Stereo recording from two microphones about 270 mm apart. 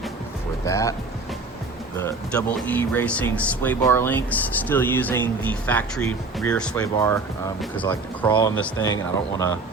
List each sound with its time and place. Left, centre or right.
0.6 s speech: centre
2.0 s speech: centre
8.3 s speech: centre